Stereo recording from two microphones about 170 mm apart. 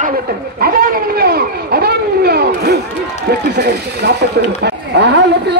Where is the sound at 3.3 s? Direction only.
75° right (ahead or behind).